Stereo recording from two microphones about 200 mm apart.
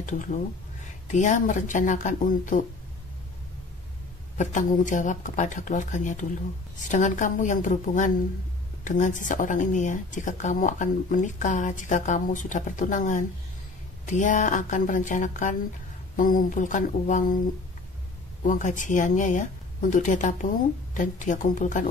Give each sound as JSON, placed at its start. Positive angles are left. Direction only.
{"t": 1.0, "sound": "speech", "side_deg": 40}
{"t": 4.4, "sound": "speech", "side_deg": 40}
{"t": 18.4, "sound": "speech", "side_deg": 40}